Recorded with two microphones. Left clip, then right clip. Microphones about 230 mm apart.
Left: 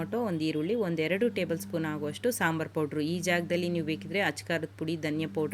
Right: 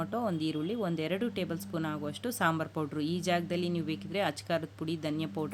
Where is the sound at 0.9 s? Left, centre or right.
Right.